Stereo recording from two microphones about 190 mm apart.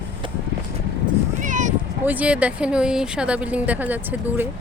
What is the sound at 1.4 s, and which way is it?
Cat, 40° right (ahead or behind).